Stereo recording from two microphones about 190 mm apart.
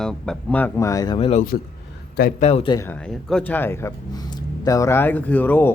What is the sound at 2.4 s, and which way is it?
Speech, 30° left (ahead or behind).